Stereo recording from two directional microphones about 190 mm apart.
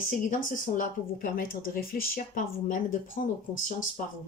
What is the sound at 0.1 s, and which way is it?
A woman's voice, 45° left (ahead or behind).